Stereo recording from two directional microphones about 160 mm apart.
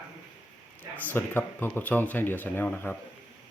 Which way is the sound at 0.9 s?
10° left (ahead or behind).